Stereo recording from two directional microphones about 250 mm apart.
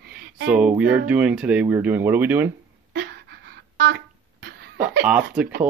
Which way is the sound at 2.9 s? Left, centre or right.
Right.